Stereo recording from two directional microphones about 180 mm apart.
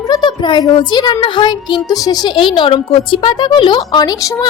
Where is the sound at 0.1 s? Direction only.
25° left (ahead or behind).